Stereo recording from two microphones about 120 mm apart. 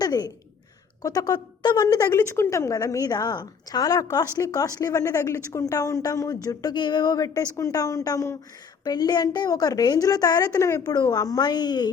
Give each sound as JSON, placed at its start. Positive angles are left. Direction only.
{"t": 0.0, "sound": "a woman's voice", "side_deg": 35}
{"t": 2.0, "sound": "a woman's voice", "side_deg": 20}